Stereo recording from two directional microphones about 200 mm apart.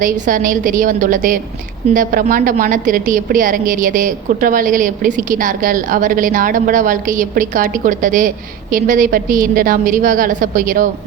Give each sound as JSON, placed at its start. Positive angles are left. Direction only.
{"t": 0.0, "sound": "a woman's voice", "side_deg": -45}